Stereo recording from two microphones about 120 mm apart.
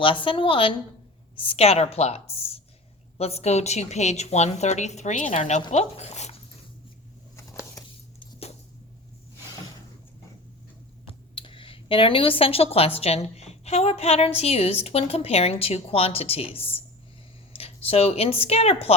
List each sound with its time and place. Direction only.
0.0 s a woman's voice: 45° left (ahead or behind); by 5.6 s 80° left
5.7 s a woman's voice: 70° left (ahead or behind)
11.3 s a woman's voice: 45° left (ahead or behind)